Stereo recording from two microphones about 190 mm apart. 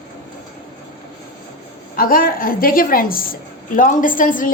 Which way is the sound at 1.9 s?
50° left (ahead or behind).